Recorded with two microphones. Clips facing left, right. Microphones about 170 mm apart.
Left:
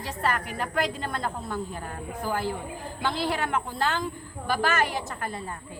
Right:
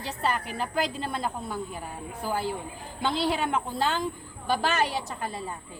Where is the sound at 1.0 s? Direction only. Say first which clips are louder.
Even; 5° right (ahead or behind).